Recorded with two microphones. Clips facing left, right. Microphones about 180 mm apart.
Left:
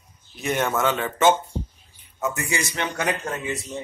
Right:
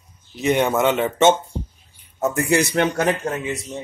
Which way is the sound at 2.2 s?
55° right (ahead or behind).